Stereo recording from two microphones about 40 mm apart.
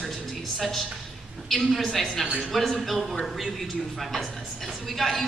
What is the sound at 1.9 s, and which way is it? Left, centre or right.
Speech, centre.